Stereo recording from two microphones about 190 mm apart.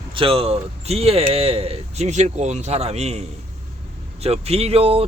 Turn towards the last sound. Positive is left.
turn(degrees=-30)  # may be behind; listen again after turning